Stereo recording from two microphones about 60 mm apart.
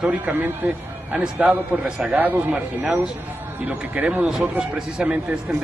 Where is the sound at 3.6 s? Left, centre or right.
Right.